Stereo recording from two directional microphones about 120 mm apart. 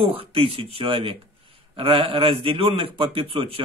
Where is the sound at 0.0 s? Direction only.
55° right (ahead or behind).